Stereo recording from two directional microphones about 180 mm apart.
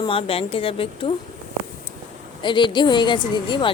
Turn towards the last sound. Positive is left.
turn(degrees=25)  # may be behind; listen again after turning